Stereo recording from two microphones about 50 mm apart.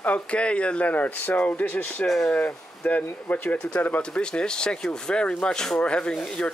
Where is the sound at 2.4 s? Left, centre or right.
Left.